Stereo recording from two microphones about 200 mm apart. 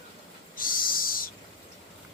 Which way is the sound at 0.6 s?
45° left (ahead or behind).